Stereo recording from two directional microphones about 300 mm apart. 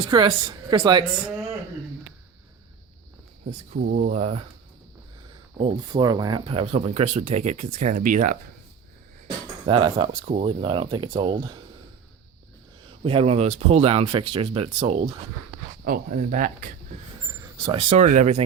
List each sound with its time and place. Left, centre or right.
0.0 s speech: centre
3.4 s speech: right
5.5 s speech: centre
9.2 s a sound: centre
10.2 s speech: centre
13.1 s speech: centre